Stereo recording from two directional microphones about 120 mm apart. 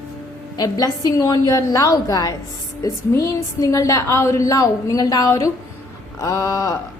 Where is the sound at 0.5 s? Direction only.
35° left (ahead or behind).